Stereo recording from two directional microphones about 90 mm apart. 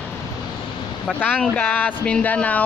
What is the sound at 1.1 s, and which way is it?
Speech, 15° left (ahead or behind).